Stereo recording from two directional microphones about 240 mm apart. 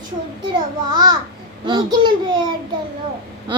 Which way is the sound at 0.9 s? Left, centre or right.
Centre.